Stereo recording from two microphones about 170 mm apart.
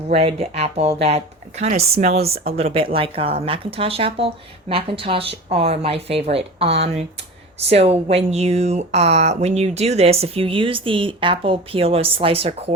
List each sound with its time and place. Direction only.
0.1 s speech: 35° right (ahead or behind)